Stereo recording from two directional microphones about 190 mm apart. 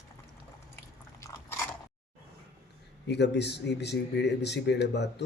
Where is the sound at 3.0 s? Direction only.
65° left (ahead or behind).